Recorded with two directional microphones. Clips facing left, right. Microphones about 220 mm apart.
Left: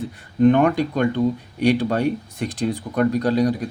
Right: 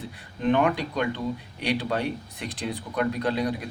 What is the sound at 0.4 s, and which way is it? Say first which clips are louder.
Speech: left 7 dB; 45° left (ahead or behind).